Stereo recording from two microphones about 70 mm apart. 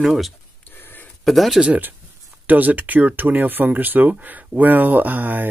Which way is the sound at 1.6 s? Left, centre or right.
Right.